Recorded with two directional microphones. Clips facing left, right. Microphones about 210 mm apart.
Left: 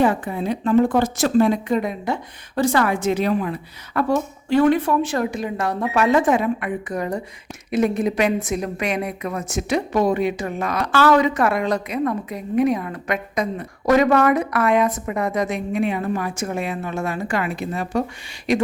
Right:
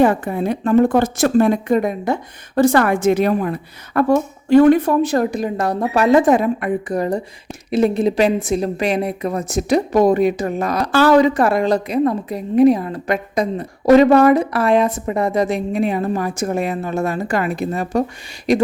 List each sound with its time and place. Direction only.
0.0 s a woman's voice: 50° right (ahead or behind)